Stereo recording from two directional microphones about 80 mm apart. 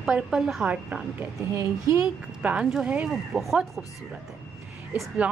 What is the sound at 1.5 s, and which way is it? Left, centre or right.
Speech, right.